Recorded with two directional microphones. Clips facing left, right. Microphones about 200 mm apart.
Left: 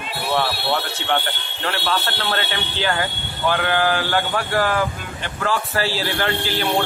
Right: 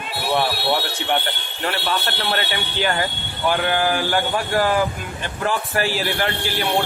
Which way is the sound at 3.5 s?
10° right (ahead or behind).